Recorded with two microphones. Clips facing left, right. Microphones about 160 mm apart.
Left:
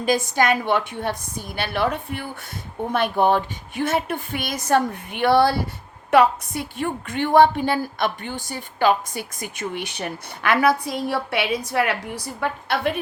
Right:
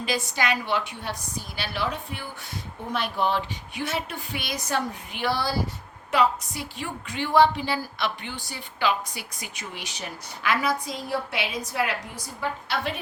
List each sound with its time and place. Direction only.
0.0 s a woman's voice: 45° left (ahead or behind)